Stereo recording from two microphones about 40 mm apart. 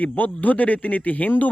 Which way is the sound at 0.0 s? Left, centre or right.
Left.